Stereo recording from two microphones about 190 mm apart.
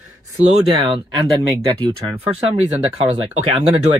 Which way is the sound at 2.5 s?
35° right (ahead or behind).